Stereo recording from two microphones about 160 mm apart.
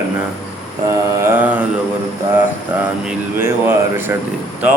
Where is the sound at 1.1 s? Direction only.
15° right (ahead or behind).